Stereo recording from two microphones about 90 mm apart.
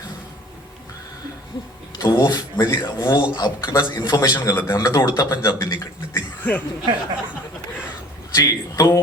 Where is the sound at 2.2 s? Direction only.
55° left (ahead or behind).